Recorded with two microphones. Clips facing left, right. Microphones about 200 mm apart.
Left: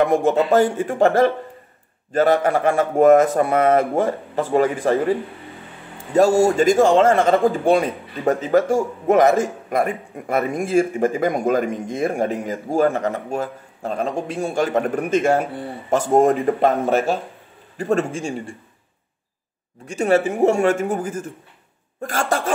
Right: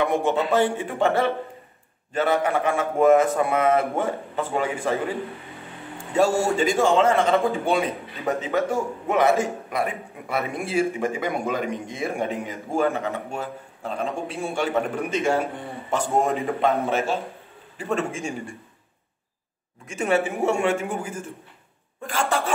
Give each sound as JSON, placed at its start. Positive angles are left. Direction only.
{"t": 0.0, "sound": "a man's voice", "side_deg": 45}
{"t": 6.4, "sound": "a man's voice", "side_deg": 45}
{"t": 19.9, "sound": "a man's voice", "side_deg": 35}